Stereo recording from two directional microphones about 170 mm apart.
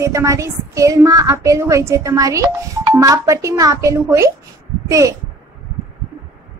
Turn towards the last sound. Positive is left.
turn(degrees=-20)  # may be behind; listen again after turning